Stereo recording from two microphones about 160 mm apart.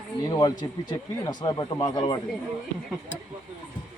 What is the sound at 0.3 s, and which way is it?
Speech, 25° left (ahead or behind).